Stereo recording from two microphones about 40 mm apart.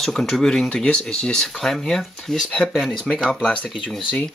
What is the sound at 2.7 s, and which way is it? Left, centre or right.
Speech, centre.